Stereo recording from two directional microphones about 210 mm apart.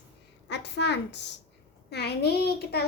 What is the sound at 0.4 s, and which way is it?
A child's voice, 55° left (ahead or behind).